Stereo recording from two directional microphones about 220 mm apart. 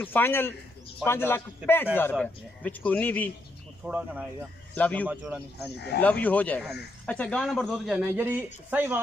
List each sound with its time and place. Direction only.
0.0 s a man's voice: 10° left (ahead or behind)
1.6 s speech: 5° right (ahead or behind)
2.0 s a man's voice: 10° left (ahead or behind)
3.8 s speech: 5° right (ahead or behind)
4.7 s a man's voice: 5° left (ahead or behind)
5.0 s speech: 5° right (ahead or behind)
5.9 s speech: 5° left (ahead or behind); by 9.0 s 10° right (ahead or behind)